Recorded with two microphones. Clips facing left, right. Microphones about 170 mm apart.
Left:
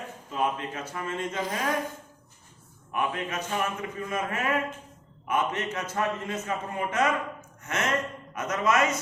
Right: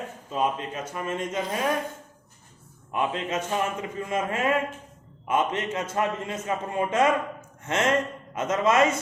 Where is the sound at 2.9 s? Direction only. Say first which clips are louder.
Right 3 dB; 25° right (ahead or behind).